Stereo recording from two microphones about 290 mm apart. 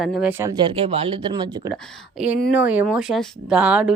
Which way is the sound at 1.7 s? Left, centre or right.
Centre.